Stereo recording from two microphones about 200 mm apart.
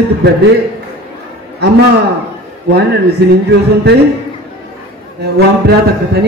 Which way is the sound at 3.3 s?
55° right (ahead or behind).